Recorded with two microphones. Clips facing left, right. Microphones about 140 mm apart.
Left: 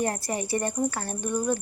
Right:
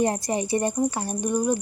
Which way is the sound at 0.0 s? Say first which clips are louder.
Right 5 dB; 20° right (ahead or behind).